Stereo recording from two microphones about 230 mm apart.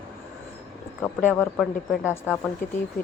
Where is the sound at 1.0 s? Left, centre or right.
Centre.